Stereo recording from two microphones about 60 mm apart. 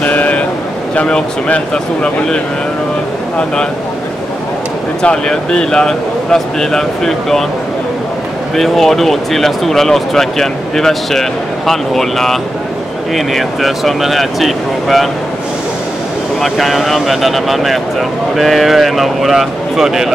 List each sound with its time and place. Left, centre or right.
0.0 s a sound: left
0.9 s speech: centre
5.0 s speech: centre
8.5 s speech: centre
16.3 s speech: centre